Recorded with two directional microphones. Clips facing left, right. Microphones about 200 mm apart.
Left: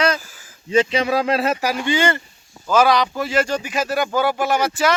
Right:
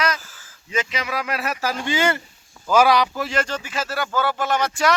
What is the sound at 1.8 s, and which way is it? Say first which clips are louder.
Speech: left 2 dB; 5° right (ahead or behind).